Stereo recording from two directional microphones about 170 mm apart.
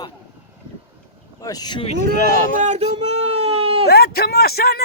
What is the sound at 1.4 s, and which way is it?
Speech, 20° left (ahead or behind).